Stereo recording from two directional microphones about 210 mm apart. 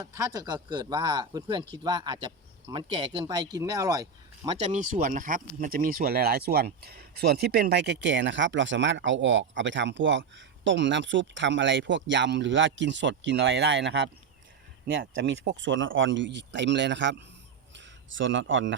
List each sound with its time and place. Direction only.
0.1 s speech: 15° right (ahead or behind)
4.5 s speech: 35° right (ahead or behind); by 14.1 s 55° right (ahead or behind)
15.1 s speech: 55° right (ahead or behind)